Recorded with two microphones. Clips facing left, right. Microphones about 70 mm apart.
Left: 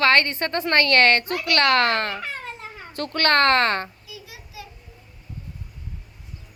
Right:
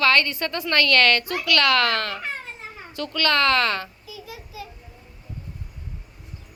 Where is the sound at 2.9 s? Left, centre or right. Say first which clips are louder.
Left 2 dB; left.